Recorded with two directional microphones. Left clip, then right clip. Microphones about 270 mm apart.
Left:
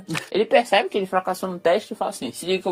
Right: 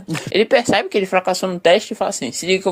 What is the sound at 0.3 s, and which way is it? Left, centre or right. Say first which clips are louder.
Speech: right 3 dB; right.